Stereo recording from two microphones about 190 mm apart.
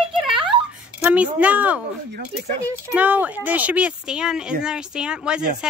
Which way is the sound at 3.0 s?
10° right (ahead or behind).